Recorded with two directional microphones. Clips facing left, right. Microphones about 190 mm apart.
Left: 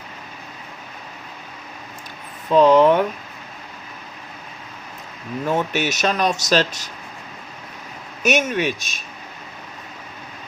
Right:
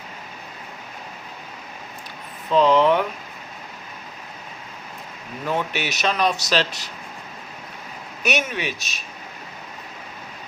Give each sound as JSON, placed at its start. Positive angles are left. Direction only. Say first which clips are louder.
{"t": 2.5, "sound": "speech", "louder": "left 4 dB", "side_deg": 45}
{"t": 5.5, "sound": "speech", "louder": "left 3 dB", "side_deg": 45}
{"t": 8.2, "sound": "speech", "louder": "left 5 dB", "side_deg": 45}